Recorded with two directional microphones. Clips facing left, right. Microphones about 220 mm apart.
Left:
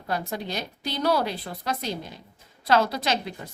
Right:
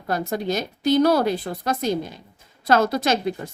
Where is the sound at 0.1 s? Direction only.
45° right (ahead or behind).